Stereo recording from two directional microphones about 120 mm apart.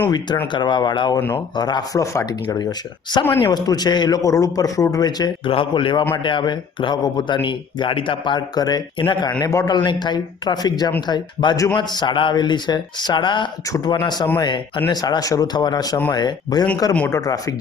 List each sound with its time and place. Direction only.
0.5 s speech: 40° left (ahead or behind)
5.5 s a man's voice: 45° left (ahead or behind)
7.4 s speech: 45° left (ahead or behind)
9.4 s speech: 30° left (ahead or behind)
9.7 s speech: 40° left (ahead or behind)